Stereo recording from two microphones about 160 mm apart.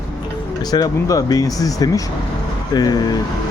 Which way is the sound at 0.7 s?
20° left (ahead or behind).